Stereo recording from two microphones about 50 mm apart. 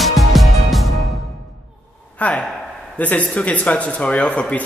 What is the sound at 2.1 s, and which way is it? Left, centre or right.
Speech, left.